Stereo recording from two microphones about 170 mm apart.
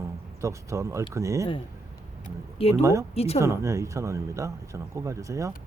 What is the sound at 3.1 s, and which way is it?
Speech, 35° left (ahead or behind).